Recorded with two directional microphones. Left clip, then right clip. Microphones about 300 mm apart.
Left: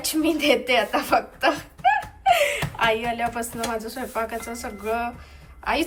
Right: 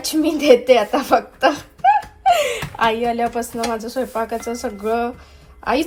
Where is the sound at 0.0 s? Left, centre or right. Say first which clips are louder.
Right 4 dB; centre.